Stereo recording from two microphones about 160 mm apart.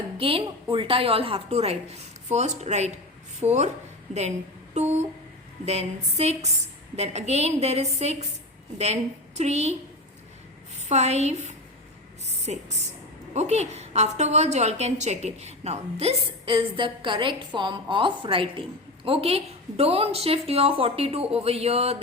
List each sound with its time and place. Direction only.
0.2 s a woman's voice: 35° right (ahead or behind)
4.7 s guitar: 45° right (ahead or behind)
5.6 s a woman's voice: 40° right (ahead or behind)
9.4 s a woman's voice: 45° right (ahead or behind)
10.8 s a woman's voice: 45° right (ahead or behind)